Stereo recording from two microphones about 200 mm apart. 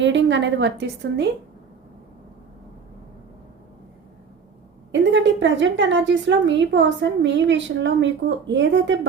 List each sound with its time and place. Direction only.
0.0 s a woman's voice: 65° right (ahead or behind)
4.9 s a woman's voice: 65° right (ahead or behind)